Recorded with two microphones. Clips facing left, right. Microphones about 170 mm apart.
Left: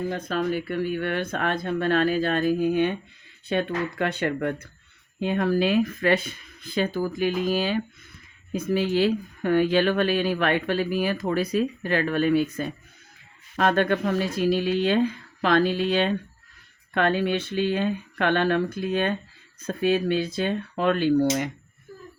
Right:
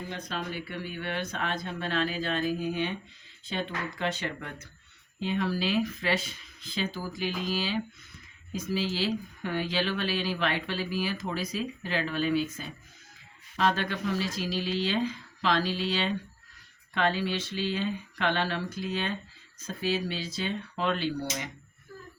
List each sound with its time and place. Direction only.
0.1 s speech: 45° left (ahead or behind)